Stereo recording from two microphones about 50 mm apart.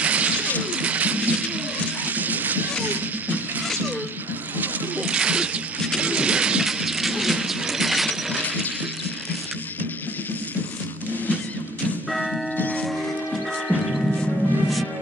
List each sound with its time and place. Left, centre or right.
0.0 s music: right
0.7 s pigeon: right
2.0 s music: right
2.9 s a sound: right
5.0 s a sound: right
5.9 s music: right
6.6 s a sound: centre
12.1 s church bell: centre
12.5 s music: left
12.8 s music: centre